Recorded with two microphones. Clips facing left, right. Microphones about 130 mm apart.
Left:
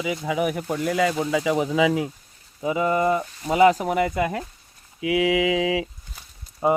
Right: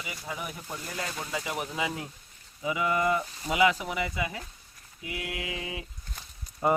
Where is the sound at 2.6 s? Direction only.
40° left (ahead or behind); by 4.4 s 55° left (ahead or behind).